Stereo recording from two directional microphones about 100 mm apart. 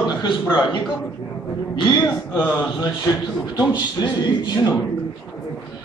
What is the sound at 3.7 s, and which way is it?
A man's voice, 45° left (ahead or behind).